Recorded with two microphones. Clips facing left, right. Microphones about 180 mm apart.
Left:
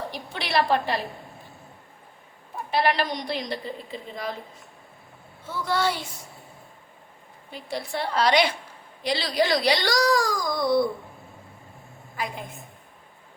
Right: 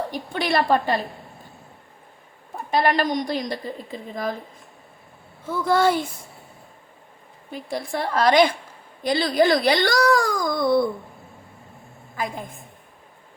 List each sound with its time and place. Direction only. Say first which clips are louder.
0.1 s a woman's voice: right 4 dB; 45° right (ahead or behind)
2.6 s a woman's voice: right 3 dB; 45° right (ahead or behind)
5.6 s a woman's voice: right 7 dB; 50° right (ahead or behind)
7.5 s a woman's voice: right 3 dB; 50° right (ahead or behind)
12.1 s a woman's voice: right 3 dB; 45° right (ahead or behind)